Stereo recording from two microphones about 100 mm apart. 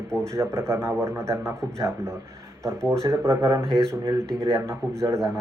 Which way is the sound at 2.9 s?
30° right (ahead or behind).